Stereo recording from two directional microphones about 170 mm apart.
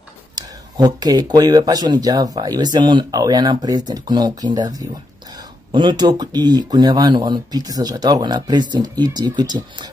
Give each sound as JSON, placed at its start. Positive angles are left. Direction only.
{"t": 0.4, "sound": "speech", "side_deg": -25}